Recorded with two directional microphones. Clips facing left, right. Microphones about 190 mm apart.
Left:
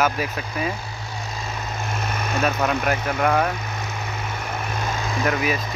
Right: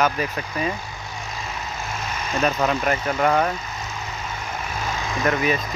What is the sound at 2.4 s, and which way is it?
Speech, 5° left (ahead or behind).